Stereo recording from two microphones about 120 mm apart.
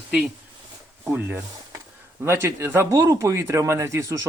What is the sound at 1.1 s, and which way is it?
A man's voice, 15° right (ahead or behind).